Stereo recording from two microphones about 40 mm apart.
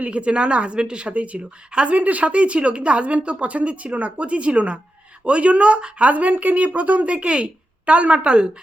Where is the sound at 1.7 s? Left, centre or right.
Right.